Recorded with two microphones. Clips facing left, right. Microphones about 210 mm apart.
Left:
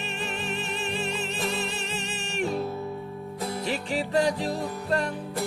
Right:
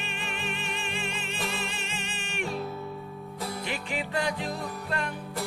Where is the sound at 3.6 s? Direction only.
35° left (ahead or behind).